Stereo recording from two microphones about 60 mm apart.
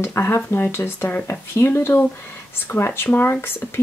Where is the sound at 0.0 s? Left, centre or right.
Left.